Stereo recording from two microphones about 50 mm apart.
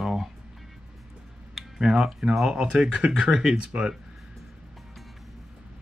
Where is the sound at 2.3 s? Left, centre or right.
Centre.